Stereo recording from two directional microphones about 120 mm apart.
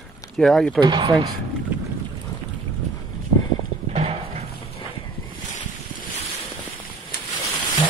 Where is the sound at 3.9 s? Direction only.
55° right (ahead or behind).